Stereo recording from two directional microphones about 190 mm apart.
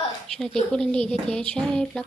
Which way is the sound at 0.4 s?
5° left (ahead or behind).